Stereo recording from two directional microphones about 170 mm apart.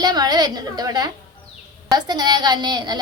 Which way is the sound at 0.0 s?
25° right (ahead or behind).